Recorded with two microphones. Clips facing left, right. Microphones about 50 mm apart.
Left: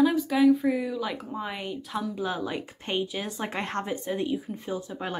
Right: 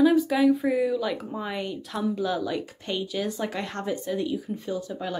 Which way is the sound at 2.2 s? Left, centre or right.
Left.